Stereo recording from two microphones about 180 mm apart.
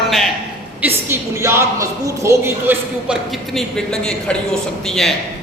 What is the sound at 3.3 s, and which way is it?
Speech, centre (ahead or behind).